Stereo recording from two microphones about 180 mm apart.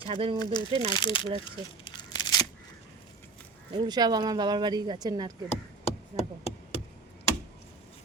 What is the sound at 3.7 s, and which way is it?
Speech, 25° right (ahead or behind).